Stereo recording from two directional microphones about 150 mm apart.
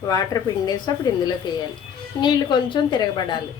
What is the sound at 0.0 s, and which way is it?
Speech, 25° left (ahead or behind).